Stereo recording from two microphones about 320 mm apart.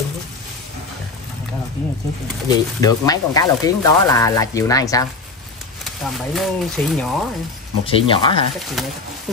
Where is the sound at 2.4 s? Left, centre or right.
Centre.